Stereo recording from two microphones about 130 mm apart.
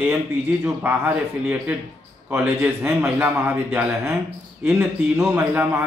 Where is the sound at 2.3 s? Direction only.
10° right (ahead or behind).